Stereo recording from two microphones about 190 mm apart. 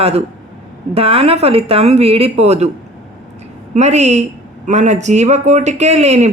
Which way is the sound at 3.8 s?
35° right (ahead or behind).